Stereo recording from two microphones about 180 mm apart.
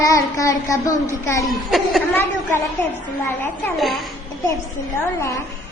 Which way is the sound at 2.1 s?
10° left (ahead or behind).